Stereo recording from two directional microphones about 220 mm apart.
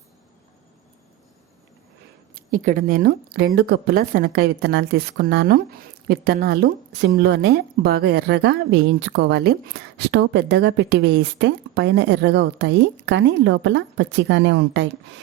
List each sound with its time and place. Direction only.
2.3 s speech: 40° right (ahead or behind); by 15.2 s 55° right (ahead or behind)